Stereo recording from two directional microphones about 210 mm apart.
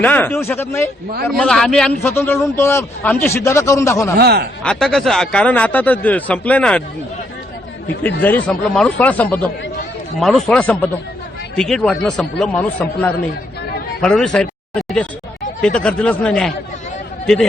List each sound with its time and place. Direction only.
0.0 s a man's voice: 10° left (ahead or behind)
4.2 s speech: 50° right (ahead or behind)
4.6 s speech: 5° left (ahead or behind)
8.2 s a man's voice: 5° left (ahead or behind)